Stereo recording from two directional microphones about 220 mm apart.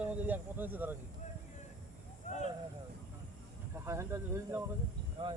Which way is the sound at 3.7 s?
10° right (ahead or behind).